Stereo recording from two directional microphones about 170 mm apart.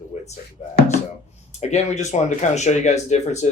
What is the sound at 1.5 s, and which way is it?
Speech, 40° left (ahead or behind).